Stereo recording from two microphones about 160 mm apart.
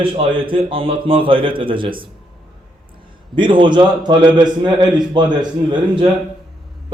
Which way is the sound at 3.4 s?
30° right (ahead or behind).